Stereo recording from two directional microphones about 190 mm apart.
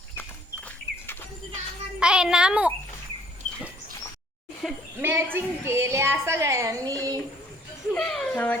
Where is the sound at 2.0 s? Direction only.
5° right (ahead or behind).